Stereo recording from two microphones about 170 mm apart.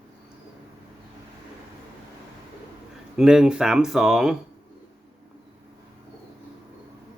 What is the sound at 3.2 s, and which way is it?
Speech, 5° right (ahead or behind).